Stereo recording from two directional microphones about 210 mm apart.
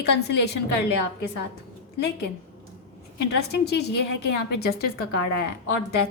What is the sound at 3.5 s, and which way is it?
A woman's voice, 50° left (ahead or behind).